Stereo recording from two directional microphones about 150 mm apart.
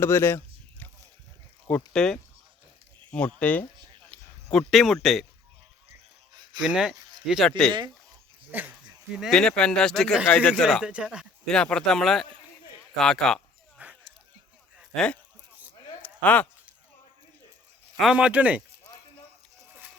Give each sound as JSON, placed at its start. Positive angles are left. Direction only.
{"t": 0.0, "sound": "a sound", "side_deg": 15}
{"t": 1.6, "sound": "speech", "side_deg": 10}
{"t": 6.3, "sound": "a sound", "side_deg": -30}
{"t": 6.6, "sound": "speech", "side_deg": -5}
{"t": 8.5, "sound": "speech", "side_deg": -10}
{"t": 9.1, "sound": "speech", "side_deg": 0}
{"t": 10.5, "sound": "speech", "side_deg": 0}
{"t": 11.4, "sound": "speech", "side_deg": 5}
{"t": 13.8, "sound": "a sound", "side_deg": -10}
{"t": 14.9, "sound": "speech", "side_deg": 5}
{"t": 16.0, "sound": "a sound", "side_deg": 10}
{"t": 17.9, "sound": "speech", "side_deg": -5}